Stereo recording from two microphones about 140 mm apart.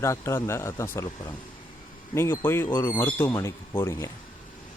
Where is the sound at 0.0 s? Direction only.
20° left (ahead or behind).